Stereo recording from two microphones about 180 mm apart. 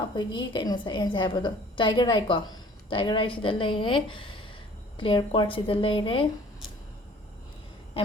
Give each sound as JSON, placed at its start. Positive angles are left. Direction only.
{"t": 0.2, "sound": "a woman's voice", "side_deg": 25}